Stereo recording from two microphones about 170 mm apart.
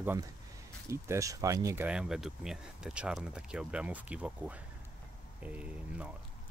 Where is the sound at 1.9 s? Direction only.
5° right (ahead or behind).